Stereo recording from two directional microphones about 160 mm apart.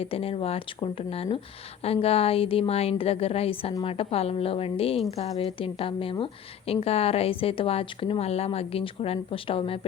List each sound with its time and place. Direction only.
0.0 s a woman's voice: 35° left (ahead or behind)